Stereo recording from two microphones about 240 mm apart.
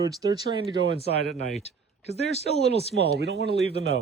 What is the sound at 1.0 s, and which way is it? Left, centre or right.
Speech, right.